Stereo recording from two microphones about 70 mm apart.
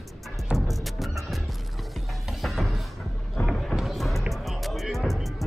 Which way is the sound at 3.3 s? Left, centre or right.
Centre.